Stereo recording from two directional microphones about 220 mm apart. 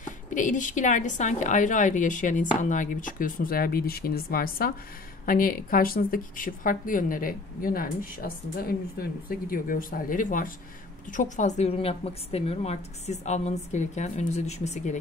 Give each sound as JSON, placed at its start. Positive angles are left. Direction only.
{"t": 0.0, "sound": "speech", "side_deg": 35}